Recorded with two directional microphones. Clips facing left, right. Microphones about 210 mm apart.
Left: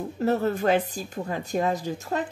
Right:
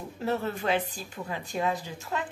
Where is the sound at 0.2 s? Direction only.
45° left (ahead or behind).